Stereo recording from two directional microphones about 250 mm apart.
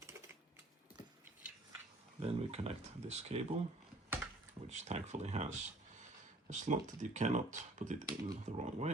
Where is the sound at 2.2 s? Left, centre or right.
Right.